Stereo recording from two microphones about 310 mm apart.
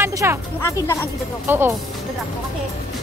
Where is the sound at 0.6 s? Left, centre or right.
Centre.